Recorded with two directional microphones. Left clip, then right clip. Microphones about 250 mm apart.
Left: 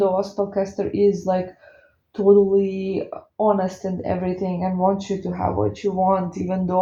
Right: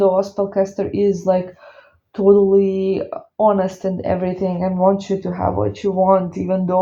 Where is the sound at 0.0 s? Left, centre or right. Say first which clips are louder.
Right 4 dB; right.